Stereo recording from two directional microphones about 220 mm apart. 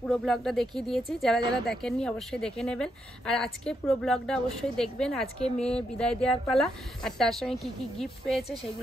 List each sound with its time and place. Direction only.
0.0 s a woman's voice: centre (ahead or behind)